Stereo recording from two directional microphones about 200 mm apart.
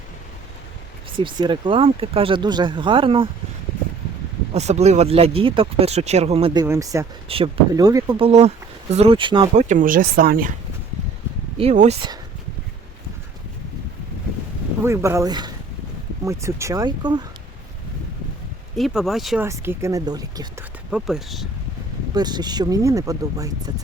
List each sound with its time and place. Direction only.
1.1 s speech: 25° right (ahead or behind)
4.5 s speech: 35° right (ahead or behind); by 7.1 s 15° right (ahead or behind)
7.3 s speech: 30° right (ahead or behind)
8.3 s speech: 30° right (ahead or behind)
9.6 s speech: 40° right (ahead or behind)
11.5 s speech: 35° right (ahead or behind)
14.8 s speech: 15° right (ahead or behind)
18.8 s speech: centre (ahead or behind)
19.5 s speech: 15° right (ahead or behind)
20.9 s speech: centre (ahead or behind)
22.1 s speech: 20° right (ahead or behind)